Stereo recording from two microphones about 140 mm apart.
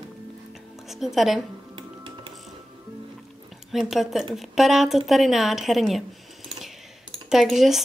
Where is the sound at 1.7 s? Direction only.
35° right (ahead or behind).